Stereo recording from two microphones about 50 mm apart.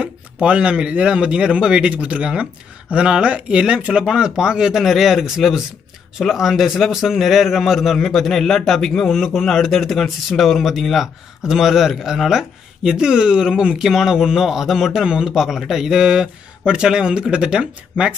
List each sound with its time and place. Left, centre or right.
0.0 s a man's voice: centre